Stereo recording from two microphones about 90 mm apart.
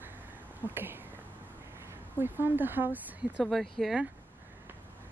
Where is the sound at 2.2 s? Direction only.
20° right (ahead or behind).